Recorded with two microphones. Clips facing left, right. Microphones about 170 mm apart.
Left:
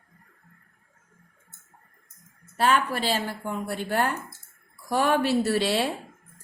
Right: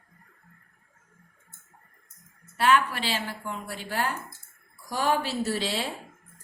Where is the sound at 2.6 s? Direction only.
40° left (ahead or behind); by 5.8 s 65° left (ahead or behind).